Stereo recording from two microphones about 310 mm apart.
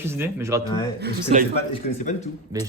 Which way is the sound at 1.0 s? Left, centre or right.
Right.